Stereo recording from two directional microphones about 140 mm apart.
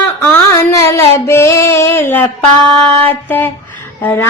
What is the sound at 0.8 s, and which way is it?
Female singing, 20° left (ahead or behind).